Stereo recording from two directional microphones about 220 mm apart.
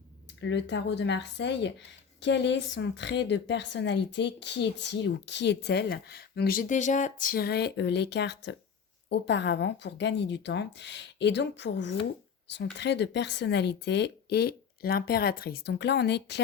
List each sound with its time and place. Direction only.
0.4 s a woman's voice: 50° left (ahead or behind)